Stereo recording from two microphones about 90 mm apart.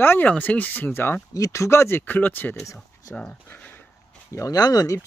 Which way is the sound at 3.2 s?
15° left (ahead or behind).